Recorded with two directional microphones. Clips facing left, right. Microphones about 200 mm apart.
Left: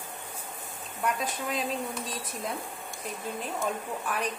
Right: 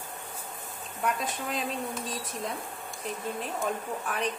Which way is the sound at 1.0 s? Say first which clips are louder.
Even; centre (ahead or behind).